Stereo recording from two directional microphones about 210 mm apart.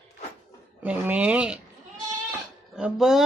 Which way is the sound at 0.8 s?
5° right (ahead or behind).